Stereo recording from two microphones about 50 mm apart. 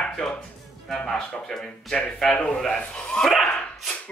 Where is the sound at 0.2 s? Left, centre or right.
Centre.